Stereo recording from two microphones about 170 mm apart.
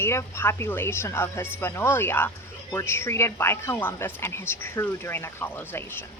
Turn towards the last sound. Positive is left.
turn(degrees=15)  # may be behind; listen again after turning